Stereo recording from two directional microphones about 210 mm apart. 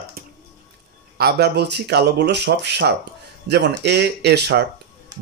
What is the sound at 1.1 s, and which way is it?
Speech, 50° right (ahead or behind).